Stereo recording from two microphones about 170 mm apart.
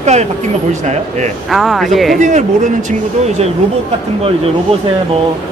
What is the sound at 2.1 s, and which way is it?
Speech, 45° right (ahead or behind).